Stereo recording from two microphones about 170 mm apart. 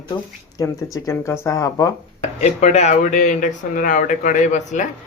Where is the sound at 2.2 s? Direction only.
40° left (ahead or behind).